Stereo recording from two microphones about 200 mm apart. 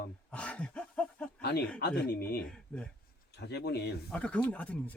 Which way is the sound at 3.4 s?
55° left (ahead or behind).